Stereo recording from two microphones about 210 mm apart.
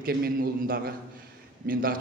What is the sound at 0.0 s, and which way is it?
A man's voice, 45° right (ahead or behind).